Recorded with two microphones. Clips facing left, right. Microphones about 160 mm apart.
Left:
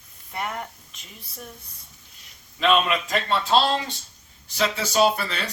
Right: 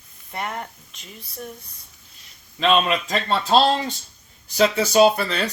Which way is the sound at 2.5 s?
30° right (ahead or behind).